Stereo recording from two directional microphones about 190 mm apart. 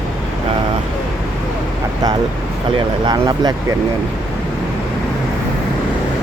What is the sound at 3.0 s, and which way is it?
Speech, 20° right (ahead or behind).